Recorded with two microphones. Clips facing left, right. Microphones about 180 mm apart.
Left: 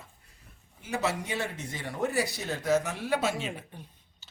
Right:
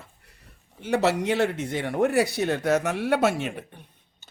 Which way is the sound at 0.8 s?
75° right (ahead or behind).